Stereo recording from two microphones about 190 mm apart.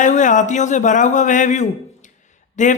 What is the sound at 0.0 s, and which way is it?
Speech, 40° left (ahead or behind).